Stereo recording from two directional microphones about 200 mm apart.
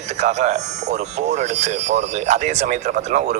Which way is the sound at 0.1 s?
35° right (ahead or behind).